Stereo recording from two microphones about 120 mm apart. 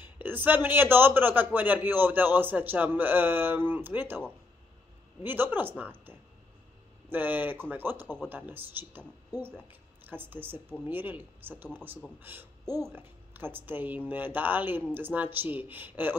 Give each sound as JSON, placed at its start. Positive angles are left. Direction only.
{"t": 0.0, "sound": "a man's voice", "side_deg": -15}
{"t": 5.2, "sound": "a man's voice", "side_deg": -15}